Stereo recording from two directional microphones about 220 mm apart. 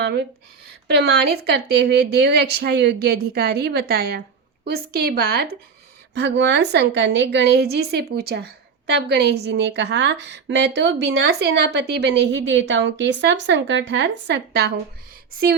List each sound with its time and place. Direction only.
0.0 s a woman's voice: 50° right (ahead or behind)